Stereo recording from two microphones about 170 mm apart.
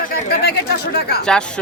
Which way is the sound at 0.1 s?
70° left (ahead or behind).